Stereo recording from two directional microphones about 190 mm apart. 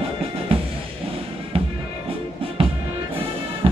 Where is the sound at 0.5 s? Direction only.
30° right (ahead or behind).